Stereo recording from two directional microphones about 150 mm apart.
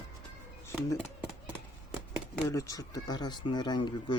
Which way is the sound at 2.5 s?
20° left (ahead or behind).